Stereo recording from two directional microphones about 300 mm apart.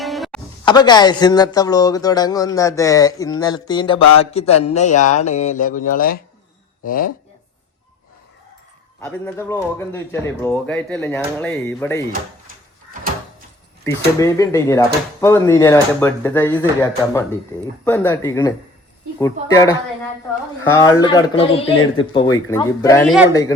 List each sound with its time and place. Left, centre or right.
0.0 s music: centre
0.6 s a man's voice: centre
9.0 s speech: centre
14.2 s speech: centre